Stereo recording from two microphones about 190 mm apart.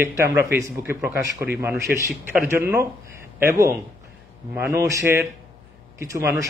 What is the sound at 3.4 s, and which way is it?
A man's voice, 15° right (ahead or behind).